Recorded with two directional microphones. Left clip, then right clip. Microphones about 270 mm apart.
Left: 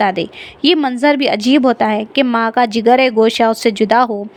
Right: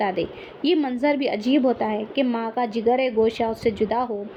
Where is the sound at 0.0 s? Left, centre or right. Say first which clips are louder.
Left 8 dB; left.